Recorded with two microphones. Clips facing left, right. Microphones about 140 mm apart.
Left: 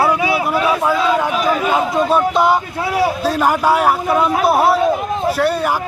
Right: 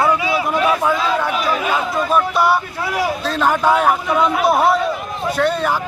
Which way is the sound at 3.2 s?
10° left (ahead or behind).